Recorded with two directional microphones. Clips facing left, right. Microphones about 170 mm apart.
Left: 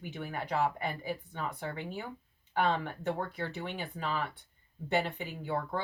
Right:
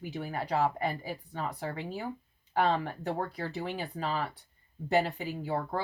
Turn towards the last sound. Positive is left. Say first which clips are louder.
# right 2 dB
turn(degrees=-35)  # may be behind; listen again after turning